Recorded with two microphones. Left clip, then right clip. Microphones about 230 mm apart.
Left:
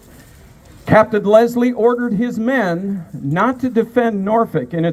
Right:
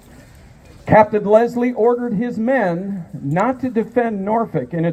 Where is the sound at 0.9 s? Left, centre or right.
Left.